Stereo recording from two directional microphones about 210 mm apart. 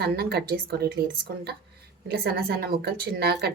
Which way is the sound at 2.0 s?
50° right (ahead or behind).